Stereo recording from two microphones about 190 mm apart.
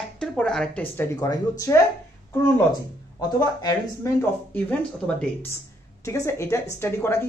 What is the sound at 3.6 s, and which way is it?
Speech, 20° left (ahead or behind).